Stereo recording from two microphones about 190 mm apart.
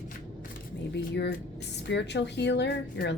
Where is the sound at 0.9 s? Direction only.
60° left (ahead or behind).